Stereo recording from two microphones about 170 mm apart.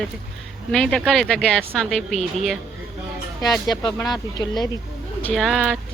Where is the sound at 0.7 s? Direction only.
5° left (ahead or behind).